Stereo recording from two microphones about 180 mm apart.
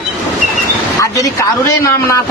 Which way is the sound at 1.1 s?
20° left (ahead or behind).